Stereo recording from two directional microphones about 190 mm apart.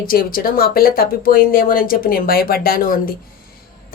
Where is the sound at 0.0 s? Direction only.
50° left (ahead or behind).